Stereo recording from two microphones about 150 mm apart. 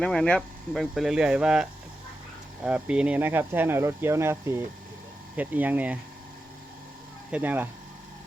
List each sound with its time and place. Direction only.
0.0 s speech: 5° left (ahead or behind)
2.6 s speech: 10° right (ahead or behind)
7.3 s speech: 10° right (ahead or behind)